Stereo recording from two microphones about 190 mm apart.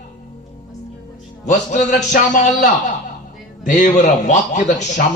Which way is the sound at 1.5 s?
40° left (ahead or behind).